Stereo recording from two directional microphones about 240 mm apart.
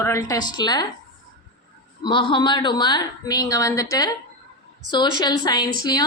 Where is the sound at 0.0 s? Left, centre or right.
Centre.